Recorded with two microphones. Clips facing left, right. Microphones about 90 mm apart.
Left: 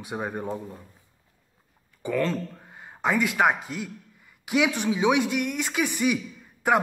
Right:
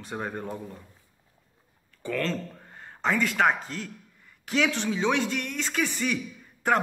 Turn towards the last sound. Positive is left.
turn(degrees=10)  # may be behind; listen again after turning